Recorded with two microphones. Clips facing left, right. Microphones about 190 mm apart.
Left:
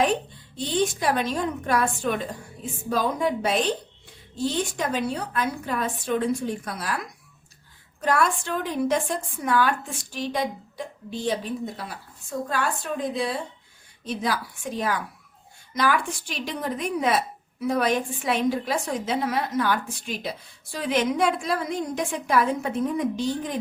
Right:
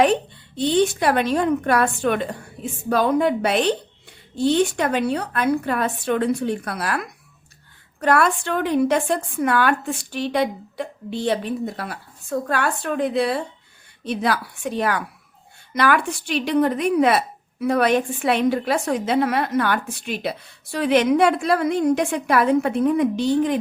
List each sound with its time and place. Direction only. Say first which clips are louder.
0.0 s a woman's voice: right 5 dB; 70° right (ahead or behind)